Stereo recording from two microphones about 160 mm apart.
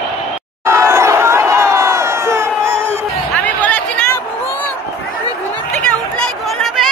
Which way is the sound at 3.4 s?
10° left (ahead or behind).